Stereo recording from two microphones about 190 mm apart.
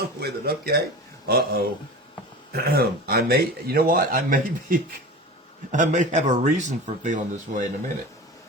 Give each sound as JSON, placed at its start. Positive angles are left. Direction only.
{"t": 0.2, "sound": "a man's voice", "side_deg": -55}